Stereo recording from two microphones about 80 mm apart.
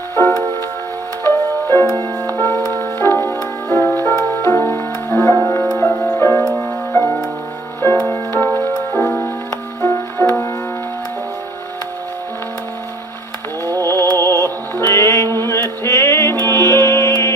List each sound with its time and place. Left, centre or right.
0.1 s music: left
9.8 s music: left
13.8 s music: left